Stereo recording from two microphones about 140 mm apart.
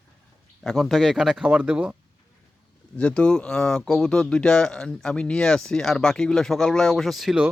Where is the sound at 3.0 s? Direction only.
10° left (ahead or behind).